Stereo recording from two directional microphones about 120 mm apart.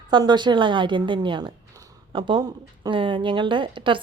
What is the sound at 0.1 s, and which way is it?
A woman's voice, 40° right (ahead or behind).